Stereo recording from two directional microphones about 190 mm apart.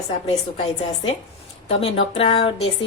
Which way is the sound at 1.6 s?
30° left (ahead or behind).